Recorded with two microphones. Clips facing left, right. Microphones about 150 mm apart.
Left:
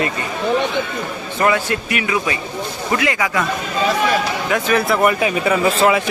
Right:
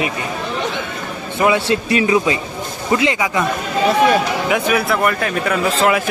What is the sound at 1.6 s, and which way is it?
Speech, 30° right (ahead or behind).